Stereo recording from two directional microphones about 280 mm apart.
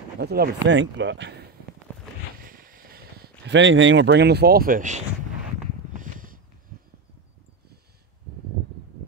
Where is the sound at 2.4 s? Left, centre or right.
Right.